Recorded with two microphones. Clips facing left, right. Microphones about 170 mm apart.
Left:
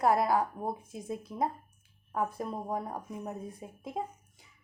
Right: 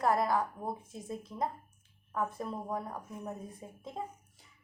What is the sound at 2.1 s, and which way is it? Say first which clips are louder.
Speech: left 2 dB; 20° left (ahead or behind).